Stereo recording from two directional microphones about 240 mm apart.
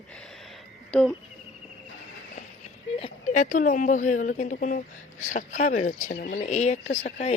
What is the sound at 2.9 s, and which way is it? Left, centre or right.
A woman's voice, left.